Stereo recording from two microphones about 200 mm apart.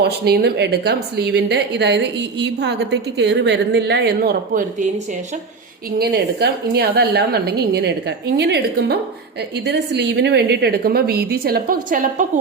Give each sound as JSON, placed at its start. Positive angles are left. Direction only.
{"t": 0.0, "sound": "a woman's voice", "side_deg": -55}
{"t": 6.0, "sound": "a woman's voice", "side_deg": -55}